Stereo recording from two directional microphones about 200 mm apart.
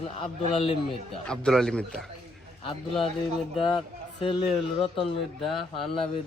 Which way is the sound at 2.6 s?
25° left (ahead or behind).